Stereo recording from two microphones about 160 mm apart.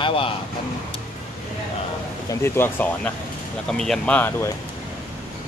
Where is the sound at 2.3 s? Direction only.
15° left (ahead or behind).